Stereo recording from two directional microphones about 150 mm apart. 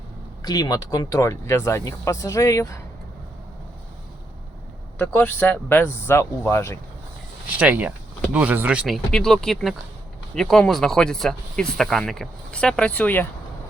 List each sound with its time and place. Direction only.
0.4 s speech: 25° left (ahead or behind)
4.9 s speech: 10° left (ahead or behind)
7.6 s speech: 10° right (ahead or behind)
9.1 s speech: 5° left (ahead or behind)